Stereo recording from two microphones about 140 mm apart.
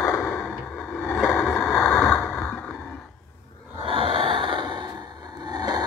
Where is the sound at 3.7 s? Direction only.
40° right (ahead or behind).